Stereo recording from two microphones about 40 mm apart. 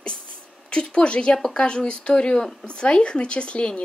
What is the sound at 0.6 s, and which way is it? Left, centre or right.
Speech, left.